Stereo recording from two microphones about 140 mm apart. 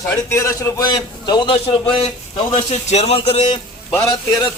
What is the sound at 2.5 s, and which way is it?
A man's voice, 50° left (ahead or behind).